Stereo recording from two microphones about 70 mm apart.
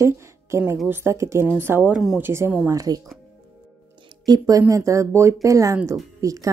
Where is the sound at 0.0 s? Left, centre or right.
Right.